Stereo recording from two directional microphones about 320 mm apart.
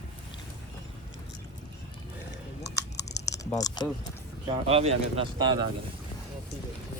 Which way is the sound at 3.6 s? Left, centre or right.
Centre.